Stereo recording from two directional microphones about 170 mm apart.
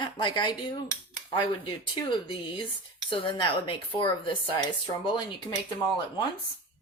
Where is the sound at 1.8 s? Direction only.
30° left (ahead or behind).